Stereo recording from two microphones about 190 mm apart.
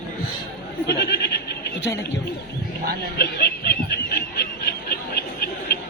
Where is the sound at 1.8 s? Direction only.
15° left (ahead or behind).